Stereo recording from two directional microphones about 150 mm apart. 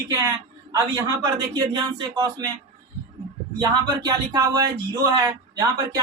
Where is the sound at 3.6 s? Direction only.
25° right (ahead or behind).